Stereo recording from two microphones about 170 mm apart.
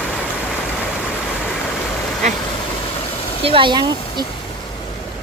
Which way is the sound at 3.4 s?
30° right (ahead or behind).